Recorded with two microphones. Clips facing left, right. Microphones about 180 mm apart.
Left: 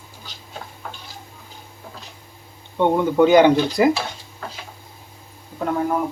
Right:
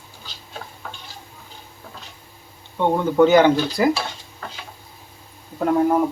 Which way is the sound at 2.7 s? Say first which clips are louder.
Left 1 dB; 15° left (ahead or behind).